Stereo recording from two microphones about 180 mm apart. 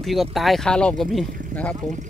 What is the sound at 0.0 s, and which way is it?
Speech, centre (ahead or behind).